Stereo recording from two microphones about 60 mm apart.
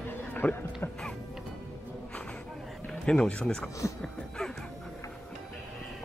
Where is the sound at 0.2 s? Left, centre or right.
Left.